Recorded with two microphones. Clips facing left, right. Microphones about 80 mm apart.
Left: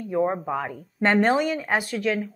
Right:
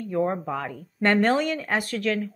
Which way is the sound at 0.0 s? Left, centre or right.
Centre.